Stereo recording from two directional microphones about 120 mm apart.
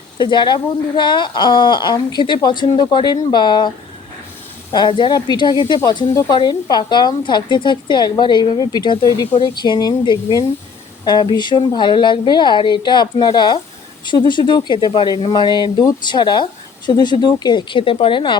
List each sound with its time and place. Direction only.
0.2 s speech: 40° left (ahead or behind)
4.7 s speech: 40° left (ahead or behind)